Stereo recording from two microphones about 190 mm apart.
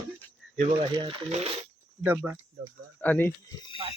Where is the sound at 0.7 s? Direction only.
25° right (ahead or behind).